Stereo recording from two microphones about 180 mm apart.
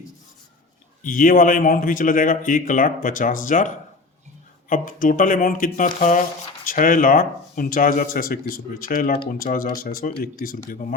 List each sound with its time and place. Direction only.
1.0 s speech: 50° left (ahead or behind)
4.7 s speech: 50° left (ahead or behind)